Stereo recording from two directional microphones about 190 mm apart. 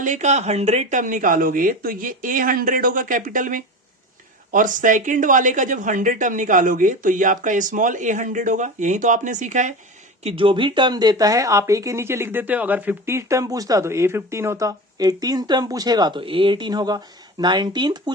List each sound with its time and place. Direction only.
0.0 s speech: 40° right (ahead or behind)
10.2 s speech: 25° right (ahead or behind)